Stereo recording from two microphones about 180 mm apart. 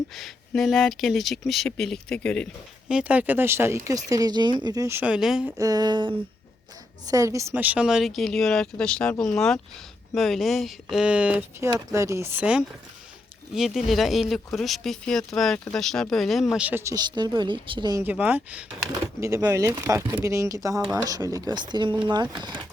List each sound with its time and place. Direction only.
0.1 s speech: centre (ahead or behind)
2.9 s speech: 10° right (ahead or behind)
5.5 s speech: 20° right (ahead or behind)
7.1 s speech: 15° right (ahead or behind)
18.0 s speech: 10° right (ahead or behind)